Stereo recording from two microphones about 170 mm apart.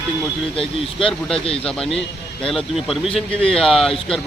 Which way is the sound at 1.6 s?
5° left (ahead or behind).